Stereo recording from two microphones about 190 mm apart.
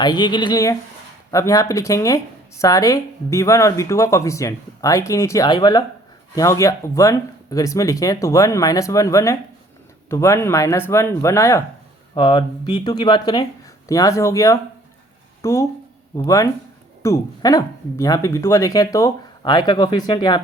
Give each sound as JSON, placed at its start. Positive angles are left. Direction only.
{"t": 0.0, "sound": "speech", "side_deg": 20}